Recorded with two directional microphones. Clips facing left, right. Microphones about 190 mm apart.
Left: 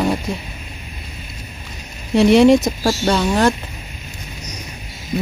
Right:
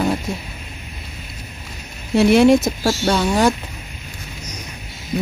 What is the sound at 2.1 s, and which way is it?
A woman's voice, 5° right (ahead or behind).